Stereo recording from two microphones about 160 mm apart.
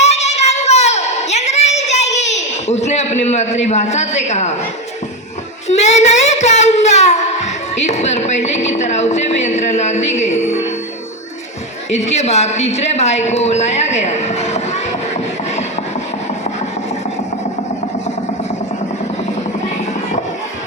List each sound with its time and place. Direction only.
0.0 s a sound: 45° left (ahead or behind)
5.6 s speech: 45° left (ahead or behind)
11.9 s speech: 45° left (ahead or behind)